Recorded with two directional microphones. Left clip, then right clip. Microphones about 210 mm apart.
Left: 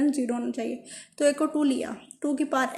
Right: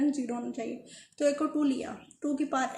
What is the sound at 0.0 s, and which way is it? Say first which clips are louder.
A woman's voice: left 4 dB; 40° left (ahead or behind).